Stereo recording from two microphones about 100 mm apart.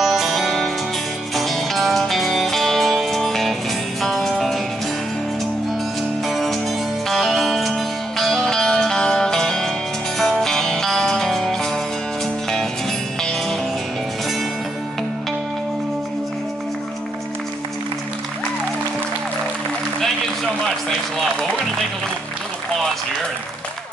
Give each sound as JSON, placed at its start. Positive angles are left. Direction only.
{"t": 0.0, "sound": "music", "side_deg": 0}
{"t": 6.2, "sound": "music", "side_deg": 0}
{"t": 13.2, "sound": "music", "side_deg": 5}